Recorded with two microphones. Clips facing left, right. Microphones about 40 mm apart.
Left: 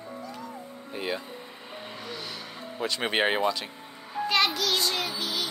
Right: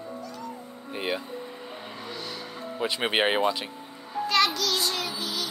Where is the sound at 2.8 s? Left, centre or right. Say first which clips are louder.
Right 1 dB; centre.